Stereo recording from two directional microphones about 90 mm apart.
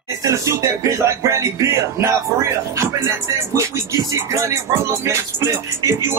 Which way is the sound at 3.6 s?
35° right (ahead or behind).